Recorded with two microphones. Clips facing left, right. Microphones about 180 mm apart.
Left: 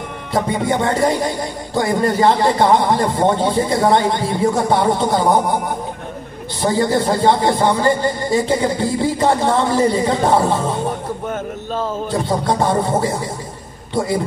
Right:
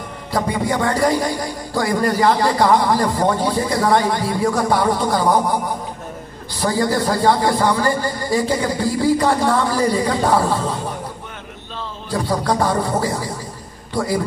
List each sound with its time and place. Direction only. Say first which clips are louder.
0.3 s a man's voice: left 2 dB; 25° left (ahead or behind)
6.6 s a man's voice: left 2 dB; 25° left (ahead or behind)
11.2 s a sound: left 12 dB; 45° left (ahead or behind)
12.1 s a man's voice: right 1 dB; 25° left (ahead or behind)